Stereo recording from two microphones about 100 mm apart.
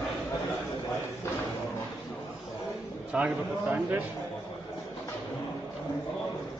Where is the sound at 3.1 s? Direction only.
15° right (ahead or behind).